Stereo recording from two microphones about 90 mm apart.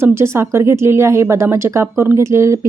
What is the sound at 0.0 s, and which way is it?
Speech, 30° right (ahead or behind).